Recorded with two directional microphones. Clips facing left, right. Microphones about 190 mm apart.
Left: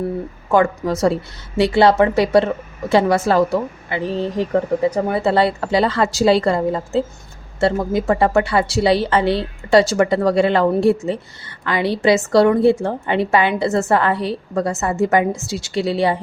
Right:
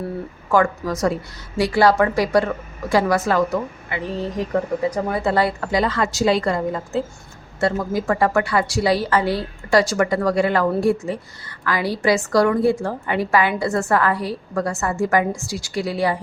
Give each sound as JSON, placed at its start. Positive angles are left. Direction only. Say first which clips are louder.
{"t": 0.5, "sound": "a woman's voice", "louder": "left 3 dB", "side_deg": 20}